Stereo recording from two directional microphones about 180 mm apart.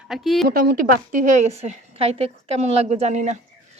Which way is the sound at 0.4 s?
55° right (ahead or behind).